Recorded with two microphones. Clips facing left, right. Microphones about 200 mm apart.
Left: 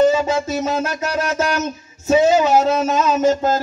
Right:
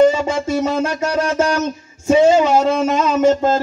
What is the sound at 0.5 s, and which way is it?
Speech, 30° right (ahead or behind).